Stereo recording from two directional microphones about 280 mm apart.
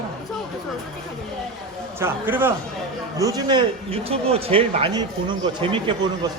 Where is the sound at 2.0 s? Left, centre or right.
Centre.